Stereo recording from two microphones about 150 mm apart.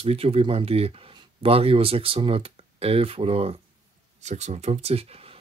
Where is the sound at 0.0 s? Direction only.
40° right (ahead or behind).